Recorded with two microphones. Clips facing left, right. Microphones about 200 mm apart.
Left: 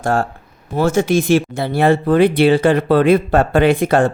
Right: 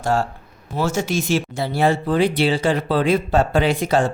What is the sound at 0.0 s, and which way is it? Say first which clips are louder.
Speech: left 3 dB; 55° left (ahead or behind).